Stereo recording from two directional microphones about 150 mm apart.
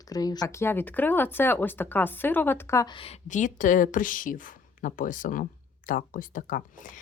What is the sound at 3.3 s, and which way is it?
Speech, 55° left (ahead or behind).